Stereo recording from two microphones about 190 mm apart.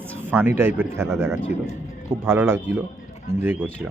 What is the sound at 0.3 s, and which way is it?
Speech, 10° right (ahead or behind).